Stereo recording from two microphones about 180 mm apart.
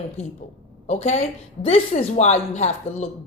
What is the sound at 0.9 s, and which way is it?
A woman's voice, 40° left (ahead or behind).